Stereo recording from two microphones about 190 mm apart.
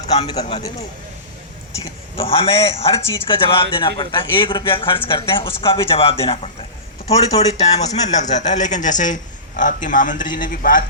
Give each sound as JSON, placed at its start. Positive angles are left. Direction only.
{"t": 0.0, "sound": "a man's voice", "side_deg": 35}
{"t": 2.1, "sound": "a man's voice", "side_deg": 30}